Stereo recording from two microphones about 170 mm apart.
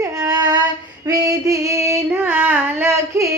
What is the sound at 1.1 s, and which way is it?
Female singing, 20° right (ahead or behind).